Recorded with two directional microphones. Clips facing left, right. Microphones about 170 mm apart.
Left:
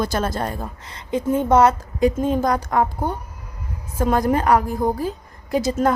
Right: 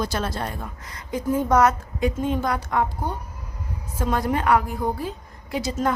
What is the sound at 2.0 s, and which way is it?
Speech, 40° left (ahead or behind).